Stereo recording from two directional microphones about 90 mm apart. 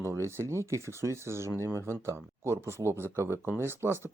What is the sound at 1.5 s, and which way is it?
Speech, 30° left (ahead or behind).